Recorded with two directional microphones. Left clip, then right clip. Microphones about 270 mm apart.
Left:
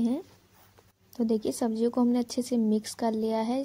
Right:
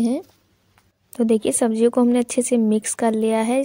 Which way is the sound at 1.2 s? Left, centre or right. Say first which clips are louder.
Right 10 dB; right.